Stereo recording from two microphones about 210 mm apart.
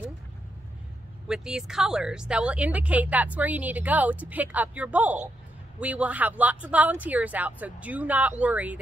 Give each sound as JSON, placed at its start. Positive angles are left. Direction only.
{"t": 1.2, "sound": "speech", "side_deg": -5}